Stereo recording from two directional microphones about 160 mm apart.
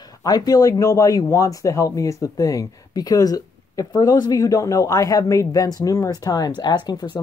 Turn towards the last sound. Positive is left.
turn(degrees=25)  # may be behind; listen again after turning